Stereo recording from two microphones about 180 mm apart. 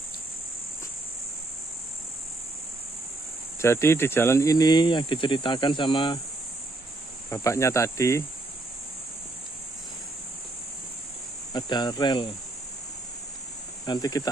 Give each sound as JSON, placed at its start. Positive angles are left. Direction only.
{"t": 3.6, "sound": "speech", "side_deg": 15}
{"t": 7.2, "sound": "cricket", "side_deg": 15}
{"t": 11.5, "sound": "speech", "side_deg": 25}
{"t": 13.8, "sound": "speech", "side_deg": 20}